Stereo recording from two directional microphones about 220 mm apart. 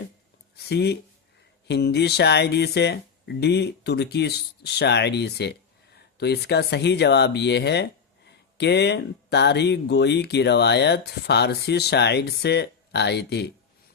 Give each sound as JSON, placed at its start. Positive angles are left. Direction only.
{"t": 0.5, "sound": "speech", "side_deg": 50}